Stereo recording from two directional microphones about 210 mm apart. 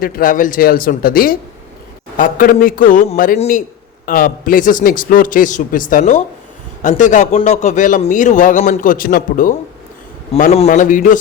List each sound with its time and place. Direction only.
0.0 s a man's voice: 45° left (ahead or behind)